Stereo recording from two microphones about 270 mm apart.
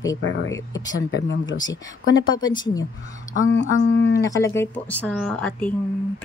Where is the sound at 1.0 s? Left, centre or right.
Left.